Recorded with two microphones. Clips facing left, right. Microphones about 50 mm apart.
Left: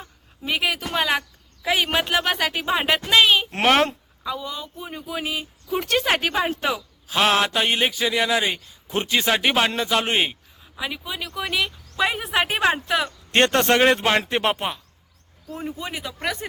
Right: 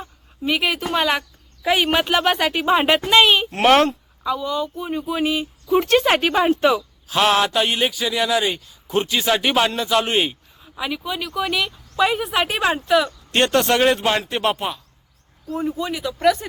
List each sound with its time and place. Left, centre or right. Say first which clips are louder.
0.0 s a sound: right 7 dB; centre
0.9 s speech: right 2 dB; centre
3.6 s speech: right 6 dB; centre
4.8 s a sound: right 9 dB; centre
5.1 s speech: right 5 dB; centre
7.1 s speech: right 2 dB; centre
10.8 s speech: right 4 dB; centre
13.3 s speech: even; left; by 16.4 s centre